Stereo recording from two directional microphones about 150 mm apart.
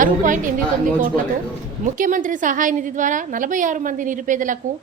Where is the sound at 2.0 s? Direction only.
60° right (ahead or behind).